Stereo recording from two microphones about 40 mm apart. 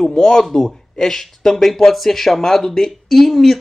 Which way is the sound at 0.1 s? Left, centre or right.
Centre.